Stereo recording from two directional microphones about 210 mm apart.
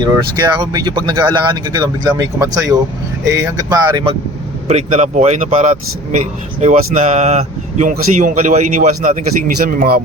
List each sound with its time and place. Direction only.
0.0 s speech: 20° right (ahead or behind)
4.7 s speech: 35° right (ahead or behind)